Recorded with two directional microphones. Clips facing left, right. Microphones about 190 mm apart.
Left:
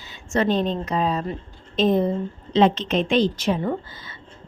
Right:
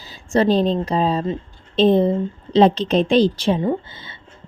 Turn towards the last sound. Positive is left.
turn(degrees=-30)  # may be behind; listen again after turning